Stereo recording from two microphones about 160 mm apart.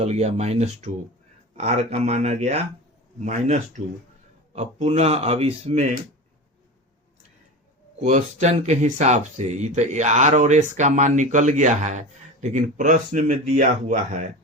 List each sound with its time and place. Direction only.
0.0 s speech: 45° right (ahead or behind)
8.0 s speech: 45° right (ahead or behind)